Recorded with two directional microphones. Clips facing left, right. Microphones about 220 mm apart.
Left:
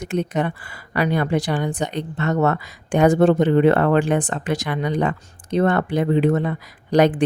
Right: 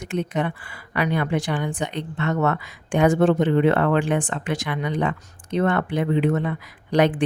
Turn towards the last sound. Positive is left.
turn(degrees=40)  # may be behind; listen again after turning